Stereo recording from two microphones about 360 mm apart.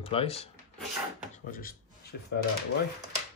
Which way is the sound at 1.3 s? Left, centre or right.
Left.